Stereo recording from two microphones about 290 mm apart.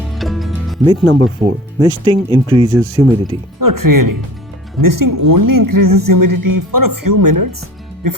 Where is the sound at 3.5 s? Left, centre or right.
Right.